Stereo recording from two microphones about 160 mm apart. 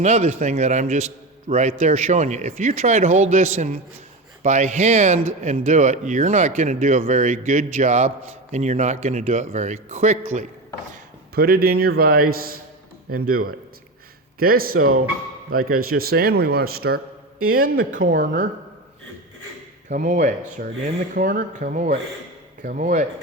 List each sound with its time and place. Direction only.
0.0 s speech: 45° right (ahead or behind)
11.3 s speech: 75° right (ahead or behind)
17.5 s speech: 65° right (ahead or behind)
19.9 s speech: 50° right (ahead or behind)